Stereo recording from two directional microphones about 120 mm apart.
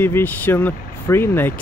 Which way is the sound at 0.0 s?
15° left (ahead or behind).